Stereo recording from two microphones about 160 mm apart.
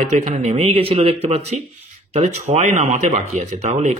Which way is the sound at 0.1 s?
45° right (ahead or behind).